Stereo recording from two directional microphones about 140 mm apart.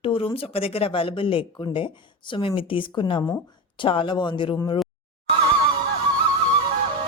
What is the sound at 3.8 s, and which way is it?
Speech, 35° left (ahead or behind).